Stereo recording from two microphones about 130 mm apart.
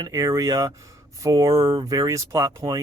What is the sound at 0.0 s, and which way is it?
Speech, 25° right (ahead or behind).